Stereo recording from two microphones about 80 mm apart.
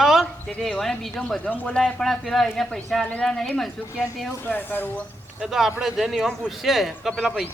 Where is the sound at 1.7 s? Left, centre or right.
Centre.